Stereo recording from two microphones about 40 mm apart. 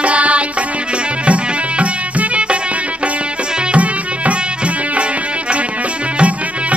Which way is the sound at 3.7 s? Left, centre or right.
Right.